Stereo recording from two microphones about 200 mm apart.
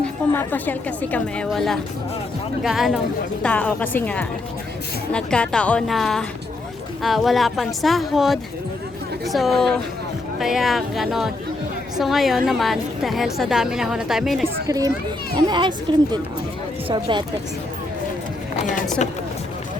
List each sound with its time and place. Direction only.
0.0 s a woman's voice: 10° left (ahead or behind)
14.4 s a child's voice: 15° right (ahead or behind)
16.9 s a child's voice: 20° right (ahead or behind)